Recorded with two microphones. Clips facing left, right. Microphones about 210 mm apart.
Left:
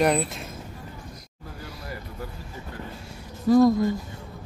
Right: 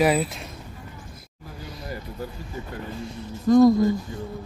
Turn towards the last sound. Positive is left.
turn(degrees=5)  # may be behind; listen again after turning